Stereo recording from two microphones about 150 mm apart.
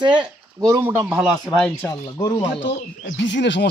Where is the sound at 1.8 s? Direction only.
20° left (ahead or behind).